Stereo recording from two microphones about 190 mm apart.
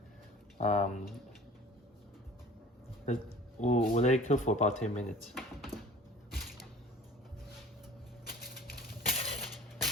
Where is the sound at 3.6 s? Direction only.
35° left (ahead or behind).